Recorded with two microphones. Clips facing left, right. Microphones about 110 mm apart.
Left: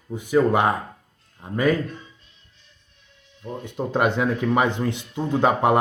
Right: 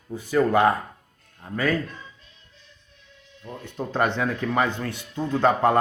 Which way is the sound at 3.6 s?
15° left (ahead or behind).